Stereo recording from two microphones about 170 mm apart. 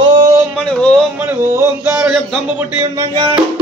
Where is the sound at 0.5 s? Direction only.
5° left (ahead or behind).